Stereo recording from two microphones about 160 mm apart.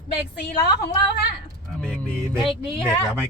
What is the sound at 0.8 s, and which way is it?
Speech, 80° left.